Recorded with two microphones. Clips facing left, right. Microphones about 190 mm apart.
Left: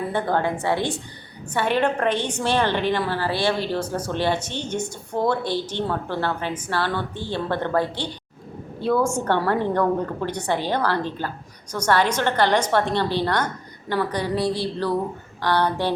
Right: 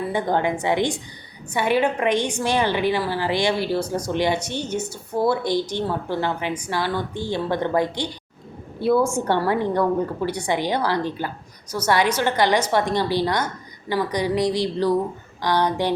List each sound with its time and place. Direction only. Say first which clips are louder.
0.1 s a woman's voice: right 2 dB; 15° right (ahead or behind)